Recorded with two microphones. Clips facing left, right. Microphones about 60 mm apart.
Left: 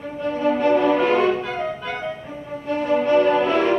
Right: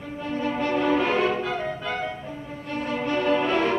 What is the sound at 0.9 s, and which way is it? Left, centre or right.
Music, centre.